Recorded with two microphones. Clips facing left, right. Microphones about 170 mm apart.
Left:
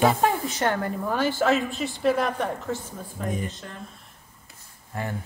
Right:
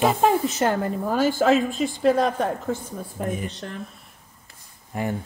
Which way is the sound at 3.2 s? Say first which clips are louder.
Right 2 dB; 70° right (ahead or behind).